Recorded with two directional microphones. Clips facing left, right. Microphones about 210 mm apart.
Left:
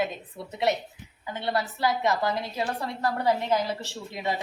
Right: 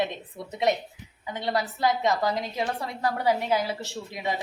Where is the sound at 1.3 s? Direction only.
15° right (ahead or behind).